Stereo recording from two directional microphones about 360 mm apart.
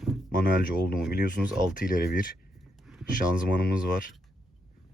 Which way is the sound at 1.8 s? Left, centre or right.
Left.